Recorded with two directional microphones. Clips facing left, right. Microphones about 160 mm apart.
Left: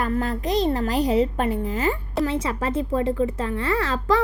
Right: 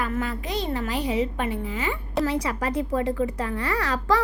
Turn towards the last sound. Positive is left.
turn(degrees=25)  # may be behind; listen again after turning